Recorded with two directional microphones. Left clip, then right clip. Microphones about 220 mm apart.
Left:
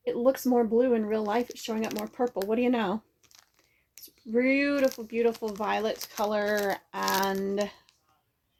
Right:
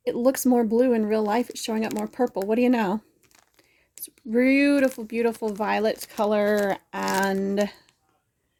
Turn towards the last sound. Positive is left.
turn(degrees=-50)  # may be behind; listen again after turning